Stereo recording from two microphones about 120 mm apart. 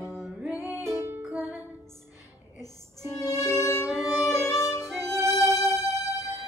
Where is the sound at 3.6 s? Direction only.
25° left (ahead or behind).